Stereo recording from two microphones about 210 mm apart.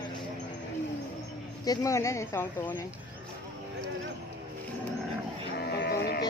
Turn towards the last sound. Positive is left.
turn(degrees=50)  # may be behind; listen again after turning